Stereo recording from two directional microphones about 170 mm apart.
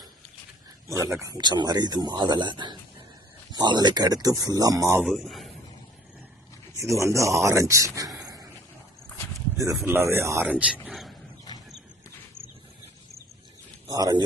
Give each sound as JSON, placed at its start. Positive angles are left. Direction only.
{"t": 0.9, "sound": "speech", "side_deg": -15}
{"t": 4.9, "sound": "speech", "side_deg": 0}
{"t": 7.0, "sound": "a man's voice", "side_deg": -20}
{"t": 9.7, "sound": "speech", "side_deg": -15}
{"t": 10.8, "sound": "a sound", "side_deg": 0}
{"t": 13.8, "sound": "a man's voice", "side_deg": -20}